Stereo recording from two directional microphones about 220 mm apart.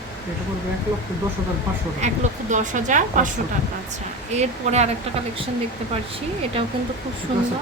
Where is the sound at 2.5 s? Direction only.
35° right (ahead or behind).